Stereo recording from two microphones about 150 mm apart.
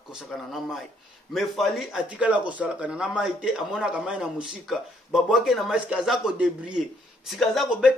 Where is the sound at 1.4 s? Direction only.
Centre (ahead or behind).